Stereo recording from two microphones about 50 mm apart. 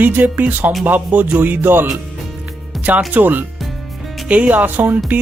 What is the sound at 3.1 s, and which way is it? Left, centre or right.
Speech, right.